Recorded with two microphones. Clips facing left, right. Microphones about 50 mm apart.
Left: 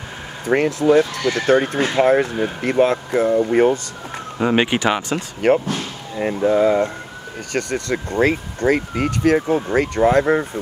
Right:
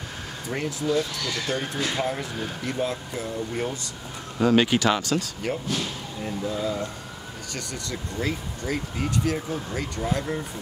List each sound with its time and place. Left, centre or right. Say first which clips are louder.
0.5 s speech: left 11 dB; left
4.4 s speech: left 2 dB; left
5.4 s speech: left 11 dB; left